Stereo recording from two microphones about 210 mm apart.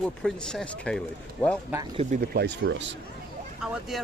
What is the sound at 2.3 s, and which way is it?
Speech, 50° right (ahead or behind).